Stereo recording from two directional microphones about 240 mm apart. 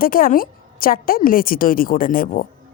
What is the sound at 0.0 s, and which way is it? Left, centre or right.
A woman's voice, left.